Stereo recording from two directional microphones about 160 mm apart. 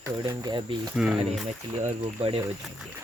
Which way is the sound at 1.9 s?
35° right (ahead or behind).